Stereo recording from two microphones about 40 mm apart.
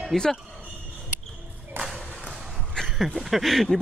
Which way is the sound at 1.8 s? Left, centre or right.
Right.